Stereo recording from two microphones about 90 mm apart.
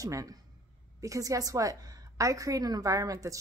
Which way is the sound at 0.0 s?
40° right (ahead or behind).